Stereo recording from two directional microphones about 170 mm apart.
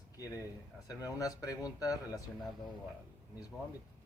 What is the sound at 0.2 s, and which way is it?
Speech, 20° left (ahead or behind).